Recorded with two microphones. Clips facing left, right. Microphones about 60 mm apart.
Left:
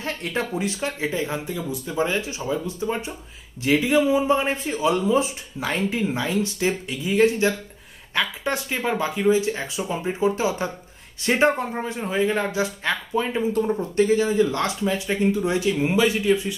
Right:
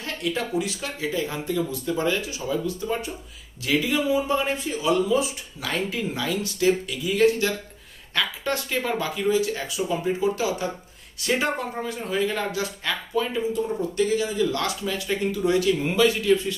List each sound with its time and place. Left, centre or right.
0.0 s speech: left